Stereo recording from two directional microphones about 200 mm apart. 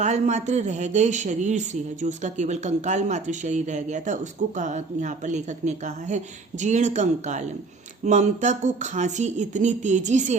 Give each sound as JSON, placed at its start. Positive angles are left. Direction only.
{"t": 0.0, "sound": "speech", "side_deg": -35}